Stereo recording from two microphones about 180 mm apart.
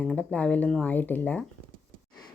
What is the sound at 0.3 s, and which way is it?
A woman's voice, 5° left (ahead or behind).